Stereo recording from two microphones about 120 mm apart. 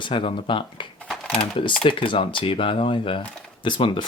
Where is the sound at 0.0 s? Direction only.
45° left (ahead or behind).